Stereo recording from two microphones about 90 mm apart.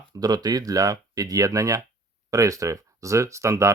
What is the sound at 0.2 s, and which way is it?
Speech, 45° right (ahead or behind).